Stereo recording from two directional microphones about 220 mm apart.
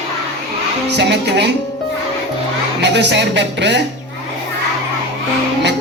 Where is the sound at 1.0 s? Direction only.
50° right (ahead or behind).